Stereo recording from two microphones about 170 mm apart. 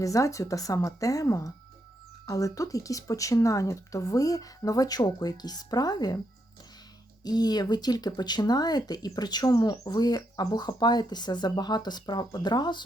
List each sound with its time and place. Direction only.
0.0 s speech: 20° left (ahead or behind)
7.3 s speech: 25° left (ahead or behind)